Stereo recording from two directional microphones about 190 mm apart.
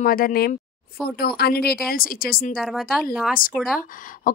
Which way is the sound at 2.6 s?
Centre (ahead or behind).